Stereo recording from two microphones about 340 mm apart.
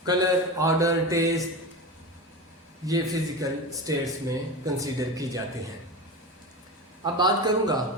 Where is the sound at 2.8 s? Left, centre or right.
Centre.